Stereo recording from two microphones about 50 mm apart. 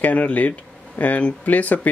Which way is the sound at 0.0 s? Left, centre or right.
Left.